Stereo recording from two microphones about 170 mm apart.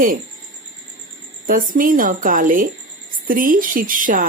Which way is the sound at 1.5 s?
55° right (ahead or behind).